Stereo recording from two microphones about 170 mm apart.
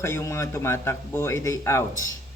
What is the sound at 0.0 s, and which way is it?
A woman's voice, 15° left (ahead or behind).